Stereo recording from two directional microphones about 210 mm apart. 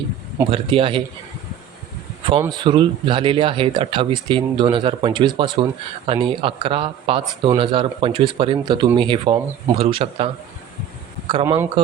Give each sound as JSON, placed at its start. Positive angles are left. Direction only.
{"t": 0.5, "sound": "speech", "side_deg": -25}
{"t": 2.5, "sound": "speech", "side_deg": -20}
{"t": 11.3, "sound": "speech", "side_deg": -20}